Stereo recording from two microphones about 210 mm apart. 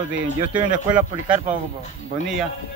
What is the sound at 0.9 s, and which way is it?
Speech, 5° right (ahead or behind).